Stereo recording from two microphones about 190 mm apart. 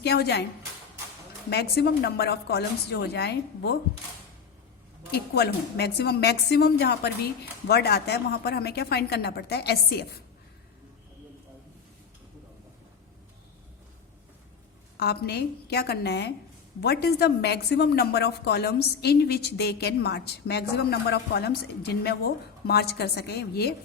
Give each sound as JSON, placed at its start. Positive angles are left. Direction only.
{"t": 0.0, "sound": "a woman's voice", "side_deg": 60}
{"t": 1.5, "sound": "a woman's voice", "side_deg": 60}
{"t": 5.1, "sound": "a woman's voice", "side_deg": 60}
{"t": 14.9, "sound": "a woman's voice", "side_deg": 55}